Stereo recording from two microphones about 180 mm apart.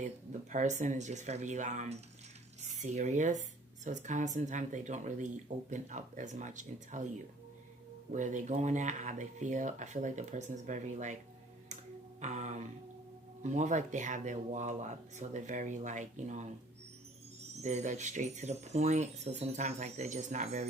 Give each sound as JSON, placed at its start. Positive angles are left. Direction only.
{"t": 0.5, "sound": "speech", "side_deg": -40}
{"t": 8.1, "sound": "speech", "side_deg": -45}
{"t": 12.2, "sound": "speech", "side_deg": -40}
{"t": 17.5, "sound": "speech", "side_deg": -40}